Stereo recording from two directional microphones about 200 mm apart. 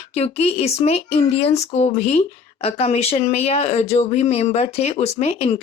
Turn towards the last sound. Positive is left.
turn(degrees=30)  # may be behind; listen again after turning